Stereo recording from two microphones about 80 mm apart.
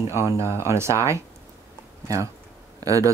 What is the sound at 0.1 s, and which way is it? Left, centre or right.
Speech, right.